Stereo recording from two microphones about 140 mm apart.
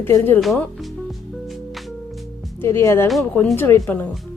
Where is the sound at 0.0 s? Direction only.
20° left (ahead or behind).